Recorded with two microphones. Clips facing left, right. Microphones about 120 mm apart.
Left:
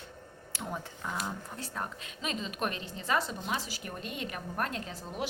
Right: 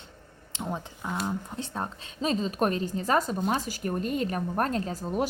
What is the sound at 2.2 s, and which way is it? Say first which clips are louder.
A woman's voice: right 8 dB; 35° right (ahead or behind).